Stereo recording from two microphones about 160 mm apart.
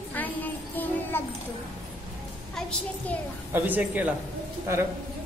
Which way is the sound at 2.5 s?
5° left (ahead or behind).